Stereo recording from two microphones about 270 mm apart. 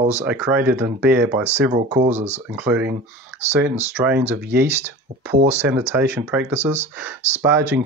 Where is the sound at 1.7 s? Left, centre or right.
Right.